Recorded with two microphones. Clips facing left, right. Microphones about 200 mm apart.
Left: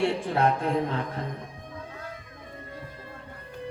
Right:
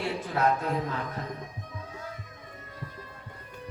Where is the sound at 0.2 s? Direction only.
30° left (ahead or behind).